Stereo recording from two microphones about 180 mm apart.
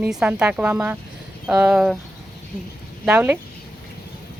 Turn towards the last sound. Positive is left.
turn(degrees=-10)  # may be behind; listen again after turning